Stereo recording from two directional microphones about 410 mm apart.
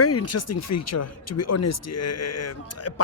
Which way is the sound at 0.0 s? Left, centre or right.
Left.